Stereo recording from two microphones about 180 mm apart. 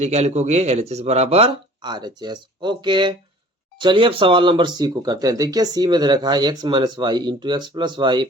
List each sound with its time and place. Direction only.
0.0 s speech: 40° right (ahead or behind)